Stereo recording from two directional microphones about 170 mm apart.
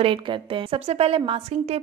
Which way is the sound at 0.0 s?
30° right (ahead or behind).